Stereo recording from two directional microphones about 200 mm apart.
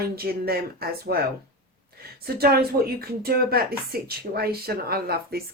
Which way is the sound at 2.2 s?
50° right (ahead or behind).